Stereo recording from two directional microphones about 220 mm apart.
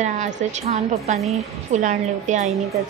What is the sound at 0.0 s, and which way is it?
A woman's voice, 30° right (ahead or behind).